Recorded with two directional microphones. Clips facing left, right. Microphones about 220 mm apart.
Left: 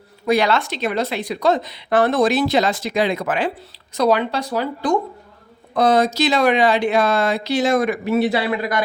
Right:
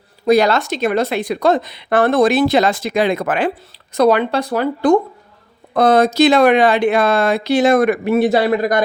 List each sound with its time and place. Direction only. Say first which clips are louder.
0.3 s speech: right 5 dB; 40° right (ahead or behind)